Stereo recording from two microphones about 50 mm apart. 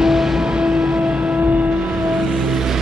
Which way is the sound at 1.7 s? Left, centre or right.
Centre.